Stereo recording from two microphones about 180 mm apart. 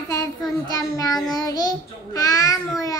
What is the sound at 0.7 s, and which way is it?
Child singing, 20° left (ahead or behind).